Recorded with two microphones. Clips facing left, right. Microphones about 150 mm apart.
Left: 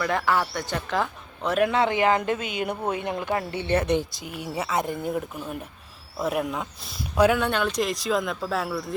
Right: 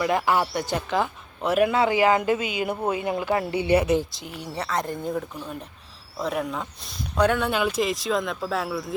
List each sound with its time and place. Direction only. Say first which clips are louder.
0.0 s speech: right 2 dB; 15° right (ahead or behind)
0.9 s speech: right 2 dB; centre (ahead or behind)